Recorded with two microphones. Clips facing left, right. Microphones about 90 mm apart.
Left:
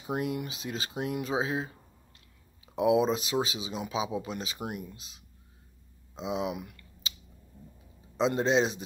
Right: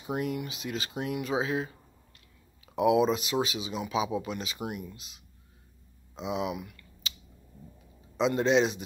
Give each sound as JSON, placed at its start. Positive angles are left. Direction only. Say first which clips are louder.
{"t": 0.0, "sound": "speech", "louder": "even", "side_deg": 40}
{"t": 6.1, "sound": "typing", "louder": "even", "side_deg": 35}
{"t": 8.2, "sound": "speech", "louder": "right 1 dB", "side_deg": 35}